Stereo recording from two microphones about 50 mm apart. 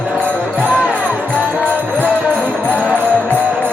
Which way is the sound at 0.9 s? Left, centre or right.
Right.